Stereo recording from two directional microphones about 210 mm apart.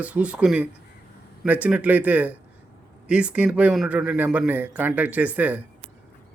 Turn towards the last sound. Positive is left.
turn(degrees=-5)  # may be behind; listen again after turning